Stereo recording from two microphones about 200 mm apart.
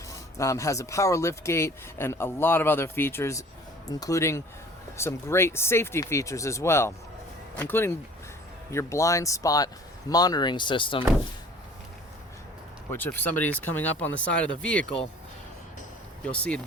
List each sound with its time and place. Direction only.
0.1 s speech: 15° left (ahead or behind)
12.9 s speech: 10° left (ahead or behind)
16.2 s speech: 5° left (ahead or behind)